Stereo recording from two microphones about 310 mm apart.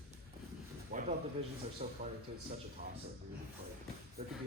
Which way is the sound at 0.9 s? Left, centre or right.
Right.